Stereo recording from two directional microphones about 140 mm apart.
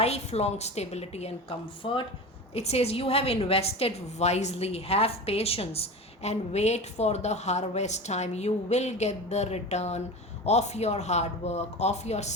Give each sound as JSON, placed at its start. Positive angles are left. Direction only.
{"t": 0.0, "sound": "a woman's voice", "side_deg": 50}
{"t": 2.6, "sound": "a woman's voice", "side_deg": 50}